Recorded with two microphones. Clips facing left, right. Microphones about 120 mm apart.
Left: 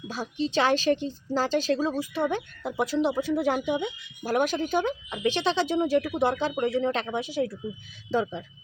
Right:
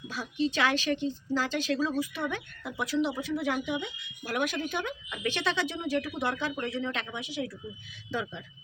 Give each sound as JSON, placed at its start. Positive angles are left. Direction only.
{"t": 0.1, "sound": "speech", "side_deg": 30}
{"t": 5.8, "sound": "speech", "side_deg": 40}